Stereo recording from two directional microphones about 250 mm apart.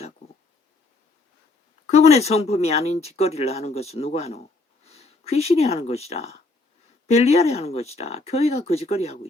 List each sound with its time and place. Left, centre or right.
1.9 s speech: left